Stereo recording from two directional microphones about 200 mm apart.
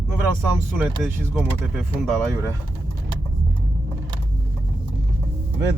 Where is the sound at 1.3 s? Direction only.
Centre (ahead or behind).